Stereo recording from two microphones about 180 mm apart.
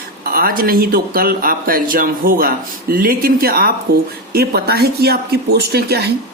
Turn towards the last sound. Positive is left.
turn(degrees=-60)  # may be behind; listen again after turning